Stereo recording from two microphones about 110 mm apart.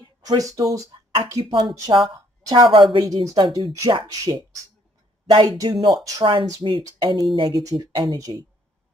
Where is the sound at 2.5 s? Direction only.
50° right (ahead or behind).